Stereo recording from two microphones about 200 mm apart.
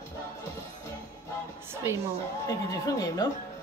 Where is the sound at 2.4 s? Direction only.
15° left (ahead or behind).